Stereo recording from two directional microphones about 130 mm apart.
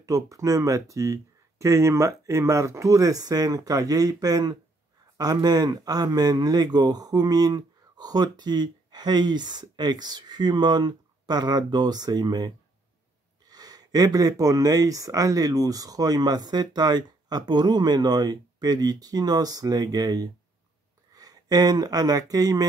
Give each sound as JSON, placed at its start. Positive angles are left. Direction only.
{"t": 0.0, "sound": "speech", "side_deg": -25}